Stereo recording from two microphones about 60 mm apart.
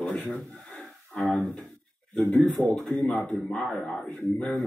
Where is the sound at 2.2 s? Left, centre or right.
Left.